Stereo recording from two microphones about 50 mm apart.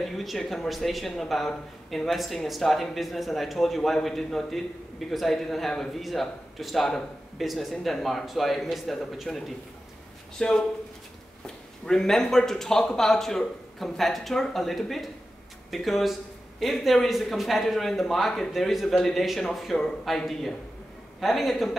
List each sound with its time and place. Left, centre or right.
0.0 s speech: centre
10.4 s speech: centre